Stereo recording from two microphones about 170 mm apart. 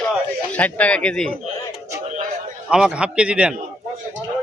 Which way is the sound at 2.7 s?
5° right (ahead or behind).